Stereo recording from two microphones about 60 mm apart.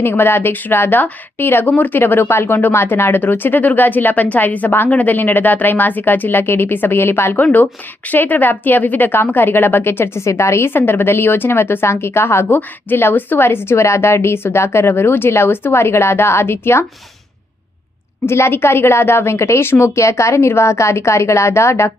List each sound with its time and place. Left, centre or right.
0.0 s a woman's voice: left
18.3 s a woman's voice: left